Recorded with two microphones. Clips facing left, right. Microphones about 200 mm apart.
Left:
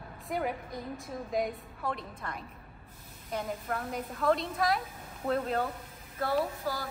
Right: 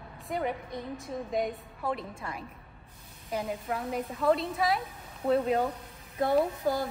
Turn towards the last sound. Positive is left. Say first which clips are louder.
# right 5 dB
turn(degrees=-20)  # may be behind; listen again after turning